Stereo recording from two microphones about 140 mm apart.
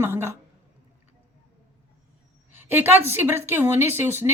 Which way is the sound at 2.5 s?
15° right (ahead or behind).